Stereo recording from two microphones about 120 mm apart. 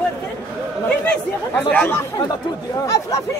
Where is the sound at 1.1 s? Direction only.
15° left (ahead or behind).